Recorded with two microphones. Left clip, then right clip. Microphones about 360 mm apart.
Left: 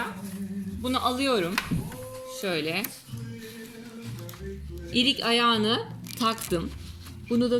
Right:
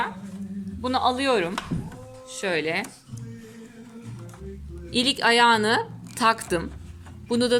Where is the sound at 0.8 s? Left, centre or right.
Right.